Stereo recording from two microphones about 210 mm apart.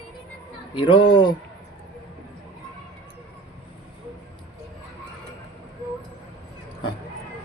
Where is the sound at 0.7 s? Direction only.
20° left (ahead or behind).